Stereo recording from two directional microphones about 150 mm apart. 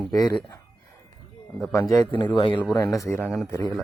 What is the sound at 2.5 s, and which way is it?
Speech, 15° left (ahead or behind).